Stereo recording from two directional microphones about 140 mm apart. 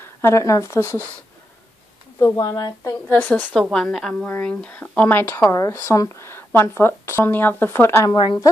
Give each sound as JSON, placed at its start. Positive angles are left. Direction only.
{"t": 0.0, "sound": "speech", "side_deg": 20}
{"t": 2.1, "sound": "speech", "side_deg": 25}
{"t": 3.1, "sound": "speech", "side_deg": 10}
{"t": 8.2, "sound": "a woman's voice", "side_deg": 35}